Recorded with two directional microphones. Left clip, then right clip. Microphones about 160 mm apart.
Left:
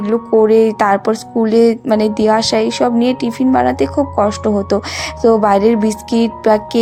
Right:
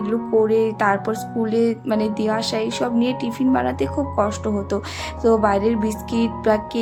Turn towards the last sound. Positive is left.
turn(degrees=40)  # may be behind; listen again after turning